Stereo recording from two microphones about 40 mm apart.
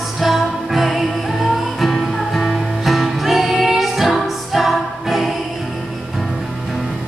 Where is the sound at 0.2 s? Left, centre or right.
Centre.